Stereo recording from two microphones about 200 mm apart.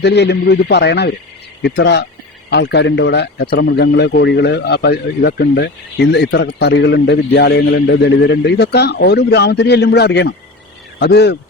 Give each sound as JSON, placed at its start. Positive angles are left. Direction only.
{"t": 0.0, "sound": "speech", "side_deg": 60}